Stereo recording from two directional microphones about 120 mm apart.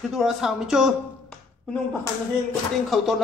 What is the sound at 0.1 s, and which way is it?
Speech, centre (ahead or behind).